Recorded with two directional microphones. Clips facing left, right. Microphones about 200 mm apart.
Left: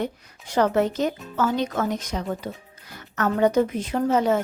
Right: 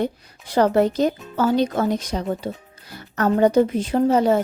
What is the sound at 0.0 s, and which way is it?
A woman's voice, 35° right (ahead or behind).